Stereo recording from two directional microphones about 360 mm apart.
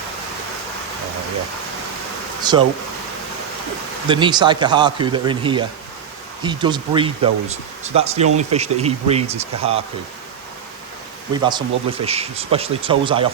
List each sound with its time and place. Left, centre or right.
2.4 s speech: centre
4.1 s speech: centre
11.4 s speech: centre